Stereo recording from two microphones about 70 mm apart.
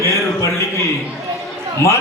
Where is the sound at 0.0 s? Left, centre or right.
Left.